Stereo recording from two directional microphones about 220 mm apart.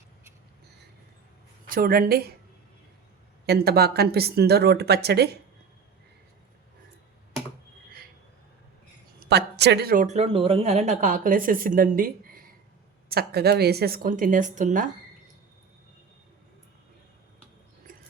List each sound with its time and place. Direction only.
1.6 s speech: 40° right (ahead or behind)
3.4 s speech: 45° right (ahead or behind)
9.2 s speech: 50° right (ahead or behind)